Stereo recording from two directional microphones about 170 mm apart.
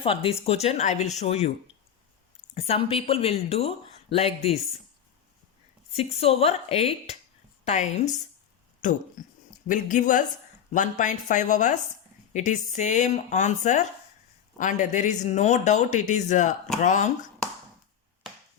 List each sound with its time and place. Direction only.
0.0 s speech: 35° left (ahead or behind)
2.6 s speech: 35° left (ahead or behind)
6.0 s speech: 35° left (ahead or behind)
9.2 s a sound: 50° left (ahead or behind)
9.6 s speech: 50° left (ahead or behind)